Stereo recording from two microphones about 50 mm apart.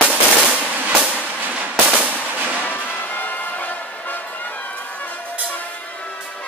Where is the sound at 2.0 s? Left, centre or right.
Right.